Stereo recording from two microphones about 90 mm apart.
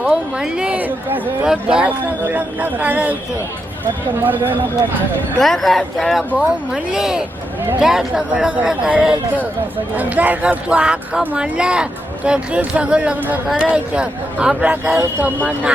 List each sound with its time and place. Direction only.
0.1 s speech: 10° right (ahead or behind)
4.2 s speech: 20° right (ahead or behind)
5.4 s speech: 5° left (ahead or behind); by 15.3 s 15° right (ahead or behind)